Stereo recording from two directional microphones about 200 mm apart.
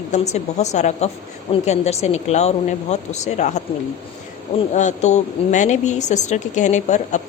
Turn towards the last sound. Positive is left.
turn(degrees=35)  # may be behind; listen again after turning